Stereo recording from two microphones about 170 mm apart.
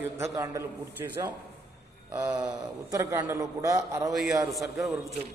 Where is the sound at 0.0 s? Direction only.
15° right (ahead or behind).